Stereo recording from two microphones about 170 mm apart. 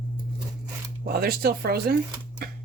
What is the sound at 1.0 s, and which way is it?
Speech, 65° right (ahead or behind).